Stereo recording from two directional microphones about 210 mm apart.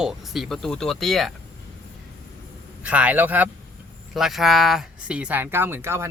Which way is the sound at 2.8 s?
5° right (ahead or behind).